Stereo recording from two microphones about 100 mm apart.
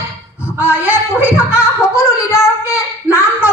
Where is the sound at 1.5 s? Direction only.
30° left (ahead or behind).